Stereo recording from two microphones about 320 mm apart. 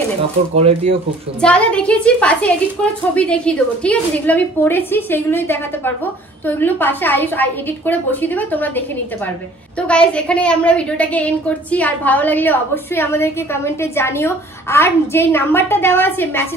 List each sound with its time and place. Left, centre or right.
0.6 s speech: centre
1.4 s a woman's voice: centre